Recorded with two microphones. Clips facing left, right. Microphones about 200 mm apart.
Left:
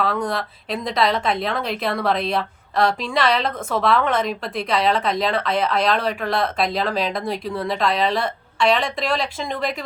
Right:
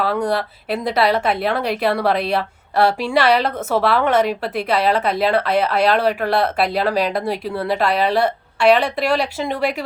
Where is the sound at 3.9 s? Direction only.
10° right (ahead or behind).